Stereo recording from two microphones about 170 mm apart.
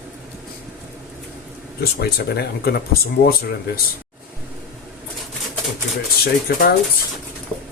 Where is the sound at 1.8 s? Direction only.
70° left (ahead or behind).